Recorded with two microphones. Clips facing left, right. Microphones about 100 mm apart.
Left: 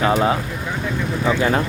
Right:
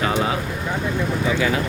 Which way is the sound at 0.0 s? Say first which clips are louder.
Left 4 dB; 35° left (ahead or behind).